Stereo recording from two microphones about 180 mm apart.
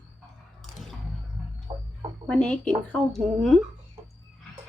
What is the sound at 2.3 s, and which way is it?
A woman's voice, 5° left (ahead or behind).